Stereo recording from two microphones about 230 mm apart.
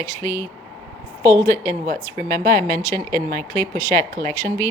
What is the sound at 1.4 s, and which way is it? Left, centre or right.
Speech, centre.